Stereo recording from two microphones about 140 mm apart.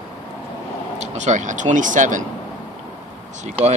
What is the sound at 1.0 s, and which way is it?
Speech, 55° right (ahead or behind).